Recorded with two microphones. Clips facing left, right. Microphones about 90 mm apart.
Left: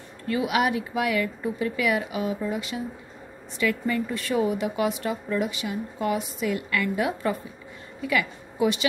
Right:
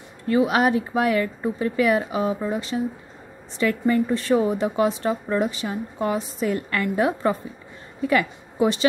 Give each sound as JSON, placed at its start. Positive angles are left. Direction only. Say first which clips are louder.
{"t": 0.3, "sound": "a woman's voice", "louder": "right 5 dB", "side_deg": -35}